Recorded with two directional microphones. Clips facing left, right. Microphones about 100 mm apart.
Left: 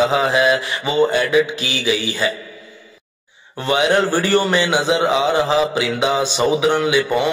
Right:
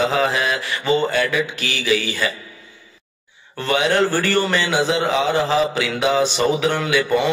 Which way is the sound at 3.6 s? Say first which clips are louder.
Left 1 dB; 20° left (ahead or behind).